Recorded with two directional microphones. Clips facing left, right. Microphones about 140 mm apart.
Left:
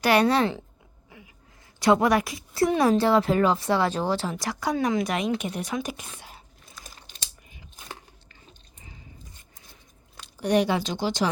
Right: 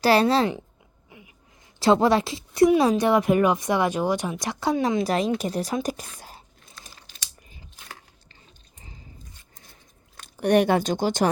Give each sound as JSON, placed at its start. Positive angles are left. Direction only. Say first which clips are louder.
{"t": 0.0, "sound": "a woman's voice", "louder": "right 2 dB", "side_deg": -30}
{"t": 1.1, "sound": "a sound", "louder": "even", "side_deg": -15}
{"t": 1.8, "sound": "a woman's voice", "louder": "right 2 dB", "side_deg": -25}
{"t": 10.2, "sound": "speech", "louder": "right 3 dB", "side_deg": -55}